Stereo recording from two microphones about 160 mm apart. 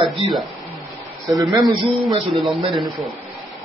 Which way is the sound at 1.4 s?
25° right (ahead or behind).